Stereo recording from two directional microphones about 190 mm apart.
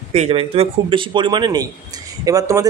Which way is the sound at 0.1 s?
30° right (ahead or behind).